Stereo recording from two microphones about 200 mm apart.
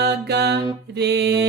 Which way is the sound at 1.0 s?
55° right (ahead or behind).